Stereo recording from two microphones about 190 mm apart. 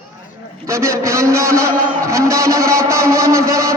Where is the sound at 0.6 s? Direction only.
15° right (ahead or behind).